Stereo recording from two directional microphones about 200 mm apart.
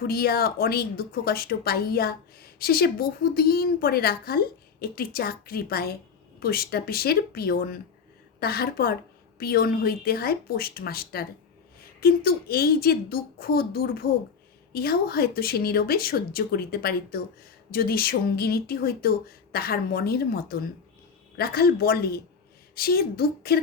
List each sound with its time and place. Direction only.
0.0 s a woman's voice: 50° left (ahead or behind)